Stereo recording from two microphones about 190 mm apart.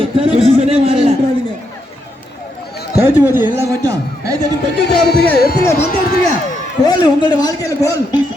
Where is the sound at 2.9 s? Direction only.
10° right (ahead or behind).